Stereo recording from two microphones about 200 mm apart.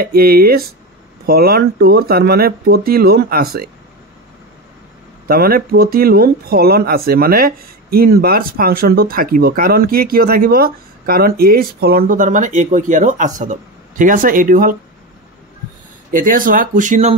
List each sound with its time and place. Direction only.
0.0 s speech: 50° right (ahead or behind)
5.3 s speech: 50° right (ahead or behind)
16.1 s speech: 45° right (ahead or behind)